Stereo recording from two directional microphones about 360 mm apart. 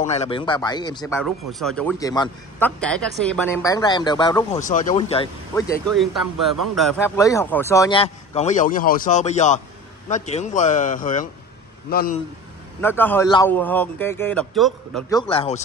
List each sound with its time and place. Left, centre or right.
0.0 s speech: centre
12.8 s a man's voice: centre